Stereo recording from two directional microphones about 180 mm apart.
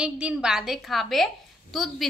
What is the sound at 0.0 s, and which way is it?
A woman's voice, 5° right (ahead or behind).